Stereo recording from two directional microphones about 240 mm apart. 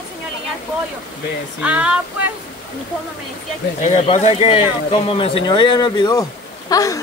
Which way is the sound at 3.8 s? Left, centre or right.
Left.